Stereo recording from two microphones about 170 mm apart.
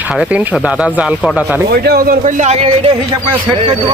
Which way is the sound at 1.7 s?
65° right (ahead or behind).